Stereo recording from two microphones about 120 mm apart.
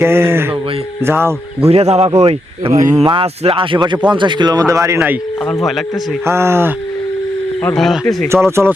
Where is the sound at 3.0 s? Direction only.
50° right (ahead or behind); by 5.0 s 25° right (ahead or behind).